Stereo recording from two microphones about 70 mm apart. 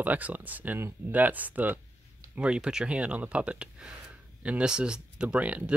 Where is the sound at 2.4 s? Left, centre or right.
Centre.